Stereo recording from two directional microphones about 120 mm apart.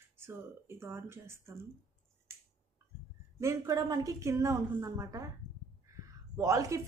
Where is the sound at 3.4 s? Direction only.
30° right (ahead or behind).